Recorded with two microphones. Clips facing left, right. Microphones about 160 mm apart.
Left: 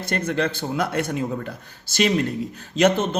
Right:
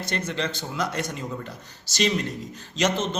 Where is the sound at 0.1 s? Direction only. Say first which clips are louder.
Left 6 dB; 55° left (ahead or behind).